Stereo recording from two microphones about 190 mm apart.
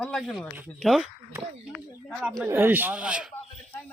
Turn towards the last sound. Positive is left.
turn(degrees=-5)  # may be behind; listen again after turning